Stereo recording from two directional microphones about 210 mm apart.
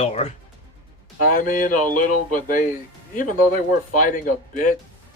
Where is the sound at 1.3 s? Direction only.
40° left (ahead or behind).